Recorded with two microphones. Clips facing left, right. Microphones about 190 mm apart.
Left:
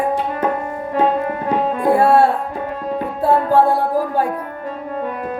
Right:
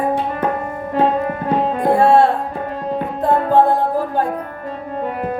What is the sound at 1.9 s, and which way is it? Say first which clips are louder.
Music: right 1 dB; 25° right (ahead or behind).